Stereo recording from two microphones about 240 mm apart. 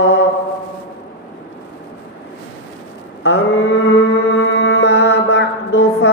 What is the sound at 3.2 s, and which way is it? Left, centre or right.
Mantra, left.